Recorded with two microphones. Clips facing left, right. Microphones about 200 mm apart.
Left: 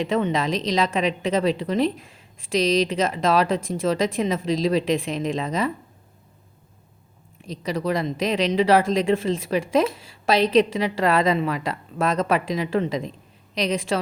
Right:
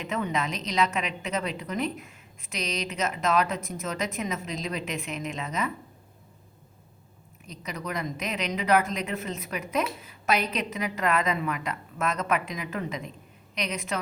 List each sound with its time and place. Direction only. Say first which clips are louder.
0.0 s a woman's voice: left 7 dB; 30° left (ahead or behind)
7.6 s a woman's voice: left 9 dB; 30° left (ahead or behind)